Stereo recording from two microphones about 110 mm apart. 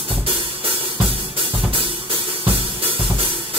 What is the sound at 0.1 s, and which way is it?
Music, 55° right (ahead or behind).